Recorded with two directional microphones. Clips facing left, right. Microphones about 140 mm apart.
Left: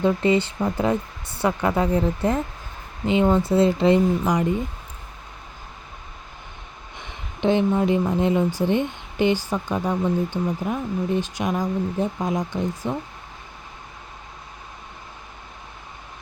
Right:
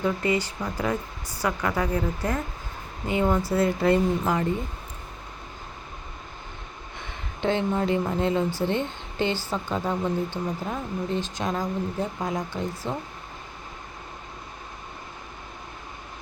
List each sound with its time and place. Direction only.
0.0 s speech: 25° left (ahead or behind)
7.0 s a sound: 20° left (ahead or behind)
8.1 s speech: 15° left (ahead or behind)